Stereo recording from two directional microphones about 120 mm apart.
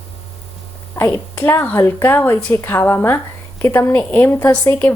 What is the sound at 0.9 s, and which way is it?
A woman's voice, 20° left (ahead or behind).